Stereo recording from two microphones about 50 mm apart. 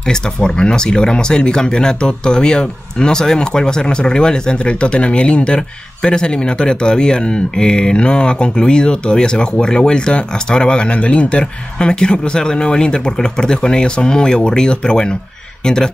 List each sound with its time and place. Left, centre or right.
0.0 s speech: centre